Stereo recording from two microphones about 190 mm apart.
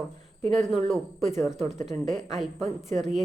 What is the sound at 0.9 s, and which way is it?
A woman's voice, centre (ahead or behind).